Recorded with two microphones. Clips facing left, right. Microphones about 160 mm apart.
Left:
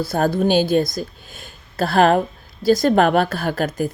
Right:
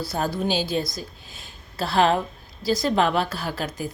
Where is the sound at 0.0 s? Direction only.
50° left (ahead or behind).